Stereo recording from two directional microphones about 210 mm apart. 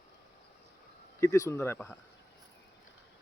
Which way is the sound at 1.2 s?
15° left (ahead or behind).